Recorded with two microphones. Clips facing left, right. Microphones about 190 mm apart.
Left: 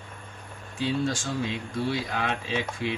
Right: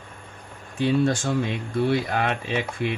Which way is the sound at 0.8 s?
60° right (ahead or behind).